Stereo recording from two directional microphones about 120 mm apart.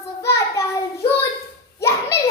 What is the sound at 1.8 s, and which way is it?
Children playing, 20° left (ahead or behind).